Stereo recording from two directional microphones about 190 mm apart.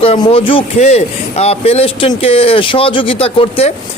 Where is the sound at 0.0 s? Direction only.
30° left (ahead or behind).